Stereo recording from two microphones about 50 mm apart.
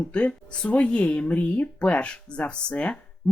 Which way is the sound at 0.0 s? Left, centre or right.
Left.